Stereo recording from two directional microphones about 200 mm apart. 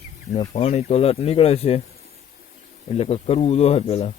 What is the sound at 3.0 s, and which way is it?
Speech, 30° left (ahead or behind).